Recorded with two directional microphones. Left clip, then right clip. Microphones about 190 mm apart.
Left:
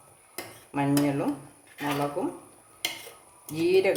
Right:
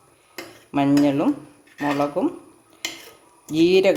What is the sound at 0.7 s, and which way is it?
Speech, 50° right (ahead or behind).